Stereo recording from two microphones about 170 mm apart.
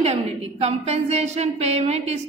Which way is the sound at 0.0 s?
40° right (ahead or behind).